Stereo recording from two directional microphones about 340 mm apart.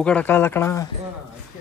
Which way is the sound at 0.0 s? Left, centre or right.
Centre.